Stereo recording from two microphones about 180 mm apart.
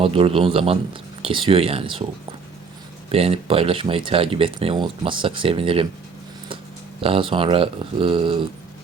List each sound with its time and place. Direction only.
0.0 s speech: 30° right (ahead or behind)
3.1 s speech: 35° right (ahead or behind)
7.0 s speech: 30° right (ahead or behind)